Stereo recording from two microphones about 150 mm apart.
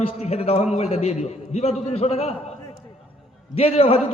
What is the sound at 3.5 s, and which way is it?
Speech, 40° left (ahead or behind).